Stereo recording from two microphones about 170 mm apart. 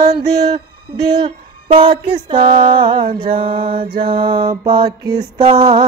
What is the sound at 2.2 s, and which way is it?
Female singing, 30° right (ahead or behind).